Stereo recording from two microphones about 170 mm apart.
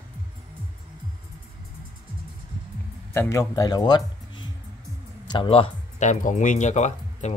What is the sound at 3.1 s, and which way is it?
Speech, 15° left (ahead or behind).